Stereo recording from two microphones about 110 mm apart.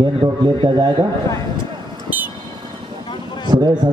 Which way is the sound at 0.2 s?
45° right (ahead or behind).